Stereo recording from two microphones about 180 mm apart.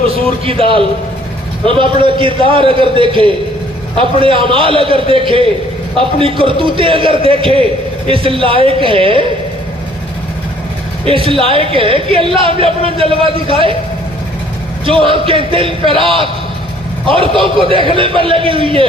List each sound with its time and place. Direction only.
0.4 s a man's voice: 30° right (ahead or behind)
11.0 s a man's voice: 30° right (ahead or behind)
14.8 s a man's voice: 30° right (ahead or behind)
17.6 s a man's voice: 30° right (ahead or behind)